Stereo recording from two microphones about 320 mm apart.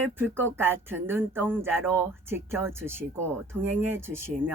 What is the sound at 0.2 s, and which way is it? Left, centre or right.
Speech, centre.